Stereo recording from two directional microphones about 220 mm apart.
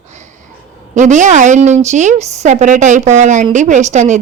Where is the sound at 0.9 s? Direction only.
35° right (ahead or behind).